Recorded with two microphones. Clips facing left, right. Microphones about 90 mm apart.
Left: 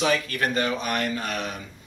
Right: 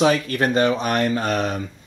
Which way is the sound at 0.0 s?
30° right (ahead or behind).